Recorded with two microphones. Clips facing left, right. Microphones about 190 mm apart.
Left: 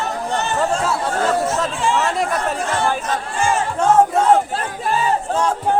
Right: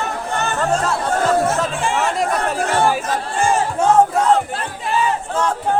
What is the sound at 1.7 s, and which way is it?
Speech, 55° right (ahead or behind).